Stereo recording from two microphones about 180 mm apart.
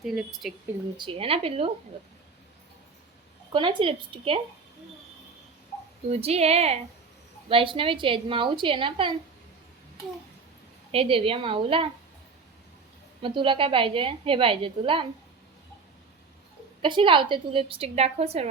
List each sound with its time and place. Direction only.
0.0 s speech: 5° right (ahead or behind)
0.9 s a woman's voice: 30° right (ahead or behind)
3.5 s a woman's voice: 25° right (ahead or behind)
6.1 s a woman's voice: 35° right (ahead or behind)
10.9 s a woman's voice: 30° right (ahead or behind)
13.2 s a woman's voice: 30° right (ahead or behind)
16.8 s a woman's voice: 25° right (ahead or behind)